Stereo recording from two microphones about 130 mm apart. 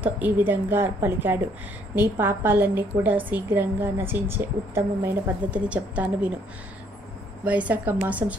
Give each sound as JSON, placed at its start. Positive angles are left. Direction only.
{"t": 0.0, "sound": "a woman's voice", "side_deg": -15}
{"t": 7.4, "sound": "a woman's voice", "side_deg": -10}